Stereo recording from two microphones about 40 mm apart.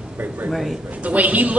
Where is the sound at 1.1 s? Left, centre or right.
Right.